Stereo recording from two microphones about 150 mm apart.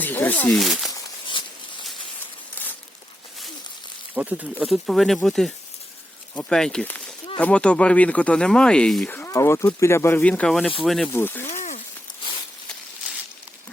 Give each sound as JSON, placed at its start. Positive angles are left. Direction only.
{"t": 0.0, "sound": "speech", "side_deg": 10}
{"t": 0.6, "sound": "speech", "side_deg": 0}
{"t": 4.1, "sound": "speech", "side_deg": -10}
{"t": 4.6, "sound": "speech", "side_deg": 0}
{"t": 9.1, "sound": "speech", "side_deg": 20}
{"t": 11.1, "sound": "speech", "side_deg": 15}
{"t": 11.4, "sound": "a sound", "side_deg": 50}